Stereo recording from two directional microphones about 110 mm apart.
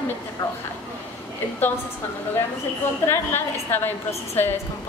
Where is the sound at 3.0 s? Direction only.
20° left (ahead or behind).